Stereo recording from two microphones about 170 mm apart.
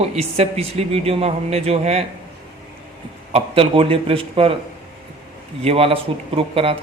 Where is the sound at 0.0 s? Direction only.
40° right (ahead or behind).